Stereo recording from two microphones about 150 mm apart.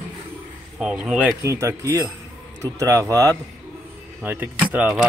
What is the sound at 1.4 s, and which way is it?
Speech, 20° right (ahead or behind).